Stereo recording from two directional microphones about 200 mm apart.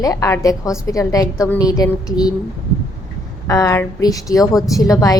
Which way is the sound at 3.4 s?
15° left (ahead or behind).